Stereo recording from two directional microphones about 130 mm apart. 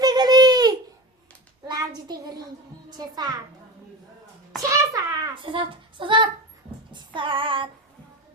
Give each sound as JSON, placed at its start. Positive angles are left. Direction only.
{"t": 0.0, "sound": "baby cry", "side_deg": -30}
{"t": 1.6, "sound": "hands", "side_deg": -35}
{"t": 3.0, "sound": "female singing", "side_deg": -30}
{"t": 4.7, "sound": "a sound", "side_deg": -25}
{"t": 5.3, "sound": "a child's voice", "side_deg": -40}
{"t": 6.9, "sound": "female singing", "side_deg": -40}